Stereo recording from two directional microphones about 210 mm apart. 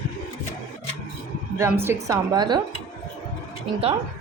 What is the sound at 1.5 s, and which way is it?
Speech, 10° right (ahead or behind).